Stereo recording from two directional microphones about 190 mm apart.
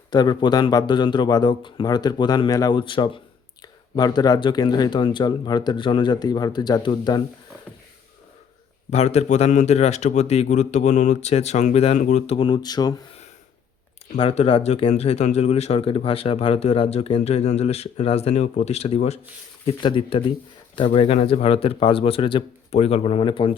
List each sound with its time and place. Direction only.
0.1 s speech: 20° left (ahead or behind)
8.9 s speech: 35° left (ahead or behind); by 13.0 s 20° left (ahead or behind)
14.2 s speech: 30° left (ahead or behind)